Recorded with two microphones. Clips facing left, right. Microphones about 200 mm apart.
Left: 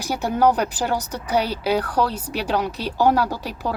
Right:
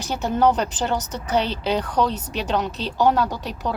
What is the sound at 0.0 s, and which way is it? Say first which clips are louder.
Speech: left 1 dB; 10° left (ahead or behind).